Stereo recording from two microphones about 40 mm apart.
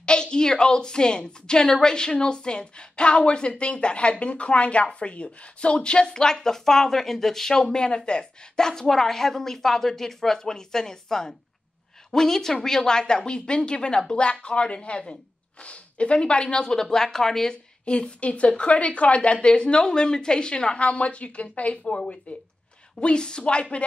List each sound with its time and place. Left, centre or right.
0.0 s a woman's voice: left
17.8 s a woman's voice: left